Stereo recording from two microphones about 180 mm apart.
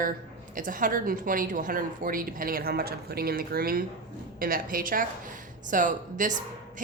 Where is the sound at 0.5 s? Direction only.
50° right (ahead or behind).